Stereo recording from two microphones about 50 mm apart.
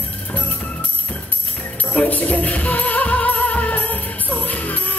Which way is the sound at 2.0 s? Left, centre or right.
Left.